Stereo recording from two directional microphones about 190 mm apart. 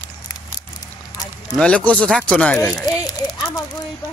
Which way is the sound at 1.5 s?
5° left (ahead or behind).